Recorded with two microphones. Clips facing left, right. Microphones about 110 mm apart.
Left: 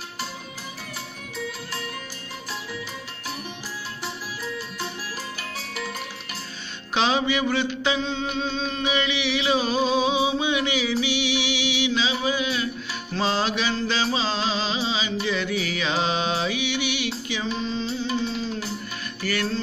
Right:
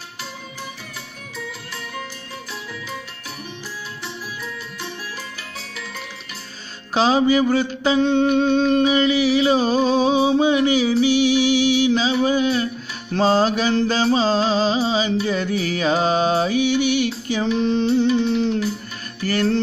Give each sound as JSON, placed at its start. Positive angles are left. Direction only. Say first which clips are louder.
{"t": 6.9, "sound": "music", "louder": "right 6 dB", "side_deg": -35}
{"t": 8.0, "sound": "music", "louder": "right 11 dB", "side_deg": -60}
{"t": 8.8, "sound": "music", "louder": "right 8 dB", "side_deg": -40}
{"t": 17.5, "sound": "music", "louder": "right 10 dB", "side_deg": -60}
{"t": 19.2, "sound": "music", "louder": "right 7 dB", "side_deg": -45}